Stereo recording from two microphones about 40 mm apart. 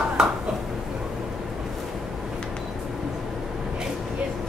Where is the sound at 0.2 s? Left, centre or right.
Centre.